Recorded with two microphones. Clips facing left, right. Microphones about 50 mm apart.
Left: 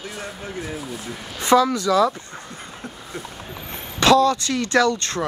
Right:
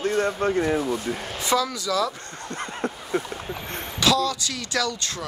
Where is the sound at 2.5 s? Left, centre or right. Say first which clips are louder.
Right 11 dB; right.